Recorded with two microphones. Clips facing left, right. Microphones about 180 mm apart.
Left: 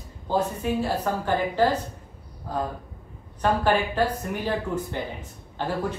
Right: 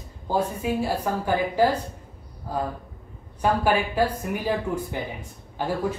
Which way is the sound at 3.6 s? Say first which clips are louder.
Even; 10° right (ahead or behind).